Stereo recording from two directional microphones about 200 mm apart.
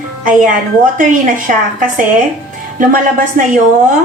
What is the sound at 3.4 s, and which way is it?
Speech, 40° right (ahead or behind).